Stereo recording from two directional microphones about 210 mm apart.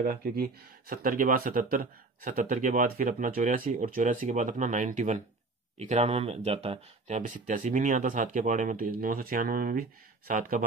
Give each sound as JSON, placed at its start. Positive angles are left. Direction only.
{"t": 0.0, "sound": "speech", "side_deg": -45}